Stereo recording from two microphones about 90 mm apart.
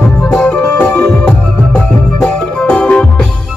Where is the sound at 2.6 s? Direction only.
10° left (ahead or behind).